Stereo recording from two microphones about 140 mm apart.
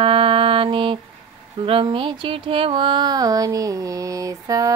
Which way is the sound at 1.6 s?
40° right (ahead or behind).